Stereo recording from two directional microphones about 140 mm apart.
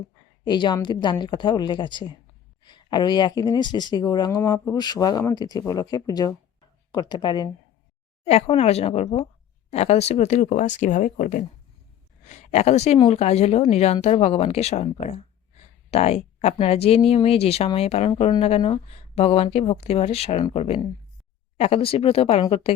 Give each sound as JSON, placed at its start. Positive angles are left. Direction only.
{"t": 0.4, "sound": "speech", "side_deg": 35}
{"t": 8.2, "sound": "speech", "side_deg": 45}
{"t": 12.3, "sound": "speech", "side_deg": 55}